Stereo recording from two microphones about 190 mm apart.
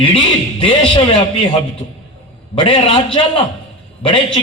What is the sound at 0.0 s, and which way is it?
A man's voice, 25° left (ahead or behind).